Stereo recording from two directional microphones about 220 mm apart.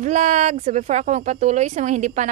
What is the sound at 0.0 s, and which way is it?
Speech, 30° right (ahead or behind).